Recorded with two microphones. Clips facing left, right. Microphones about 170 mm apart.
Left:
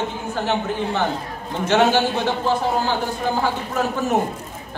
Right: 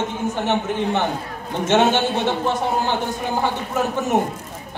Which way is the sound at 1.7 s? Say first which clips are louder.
Even; 20° right (ahead or behind).